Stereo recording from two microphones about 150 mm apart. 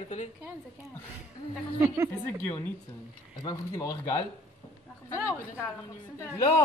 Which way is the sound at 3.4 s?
25° left (ahead or behind).